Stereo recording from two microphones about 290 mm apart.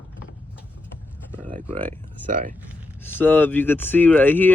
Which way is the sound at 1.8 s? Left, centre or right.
Centre.